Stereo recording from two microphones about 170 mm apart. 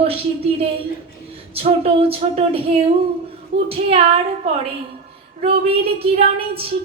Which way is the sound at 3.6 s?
35° right (ahead or behind).